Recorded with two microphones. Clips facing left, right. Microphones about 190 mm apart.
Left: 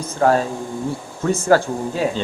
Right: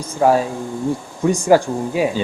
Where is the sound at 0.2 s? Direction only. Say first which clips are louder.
Right 2 dB; 10° right (ahead or behind).